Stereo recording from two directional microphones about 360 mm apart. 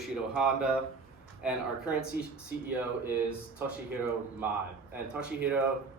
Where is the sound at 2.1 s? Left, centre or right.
Right.